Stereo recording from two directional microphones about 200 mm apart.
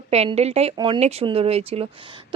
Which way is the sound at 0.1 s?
30° right (ahead or behind).